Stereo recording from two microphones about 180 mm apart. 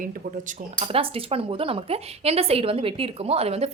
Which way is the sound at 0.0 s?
45° right (ahead or behind).